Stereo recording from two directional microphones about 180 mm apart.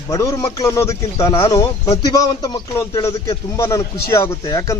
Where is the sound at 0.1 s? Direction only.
15° left (ahead or behind).